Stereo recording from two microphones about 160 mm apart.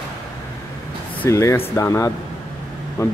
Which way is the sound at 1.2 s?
20° left (ahead or behind).